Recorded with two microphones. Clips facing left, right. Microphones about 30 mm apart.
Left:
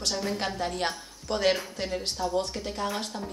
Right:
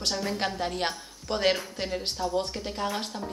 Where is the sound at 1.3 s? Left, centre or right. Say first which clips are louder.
Even; right.